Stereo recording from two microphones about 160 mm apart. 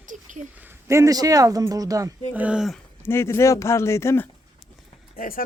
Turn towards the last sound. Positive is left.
turn(degrees=60)  # may be behind; listen again after turning